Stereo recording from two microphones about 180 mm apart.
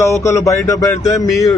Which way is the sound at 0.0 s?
15° left (ahead or behind).